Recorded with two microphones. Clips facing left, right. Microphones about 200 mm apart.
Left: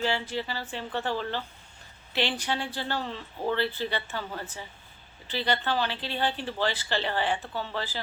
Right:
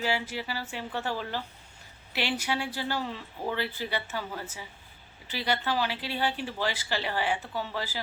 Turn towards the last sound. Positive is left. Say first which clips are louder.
# even
turn(degrees=-10)  # may be behind; listen again after turning